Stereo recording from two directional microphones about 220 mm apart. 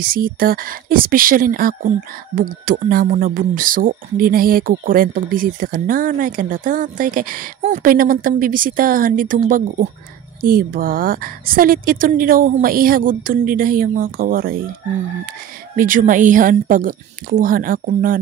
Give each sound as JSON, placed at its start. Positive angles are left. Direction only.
{"t": 0.0, "sound": "speech", "side_deg": -40}
{"t": 10.4, "sound": "speech", "side_deg": -40}
{"t": 15.7, "sound": "speech", "side_deg": -40}